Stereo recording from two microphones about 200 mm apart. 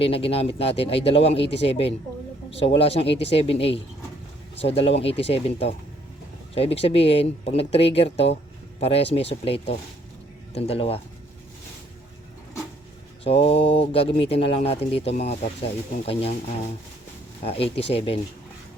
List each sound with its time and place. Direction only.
0.0 s speech: 30° left (ahead or behind)
13.2 s speech: 30° left (ahead or behind)
17.4 s speech: 30° left (ahead or behind)